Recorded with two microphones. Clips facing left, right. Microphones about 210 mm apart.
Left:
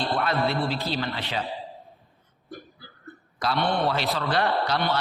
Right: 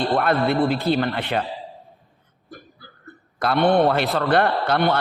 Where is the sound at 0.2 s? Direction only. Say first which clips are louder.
Right 6 dB; 55° right (ahead or behind).